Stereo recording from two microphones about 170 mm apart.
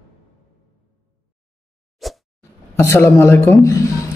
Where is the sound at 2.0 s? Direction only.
Centre (ahead or behind).